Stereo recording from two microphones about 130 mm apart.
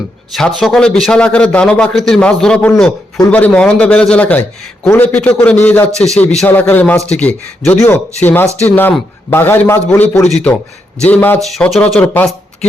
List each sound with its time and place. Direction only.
0.3 s a man's voice: centre (ahead or behind); by 10.2 s 20° left (ahead or behind)
10.2 s a man's voice: centre (ahead or behind)
11.1 s a man's voice: 15° left (ahead or behind)
11.3 s a man's voice: centre (ahead or behind)